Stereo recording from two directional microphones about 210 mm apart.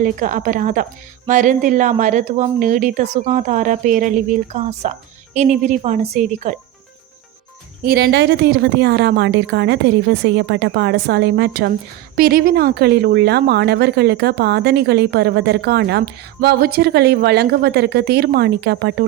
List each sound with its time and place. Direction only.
0.0 s a woman's voice: 40° right (ahead or behind)
7.9 s speech: 50° right (ahead or behind)